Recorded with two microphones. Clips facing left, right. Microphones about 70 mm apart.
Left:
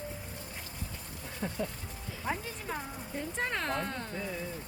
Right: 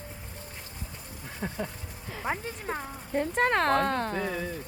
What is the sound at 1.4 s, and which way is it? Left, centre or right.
Speech, right.